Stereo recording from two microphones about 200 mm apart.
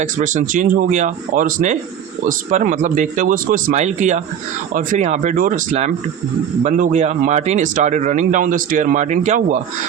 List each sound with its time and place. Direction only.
0.0 s speech: 40° right (ahead or behind)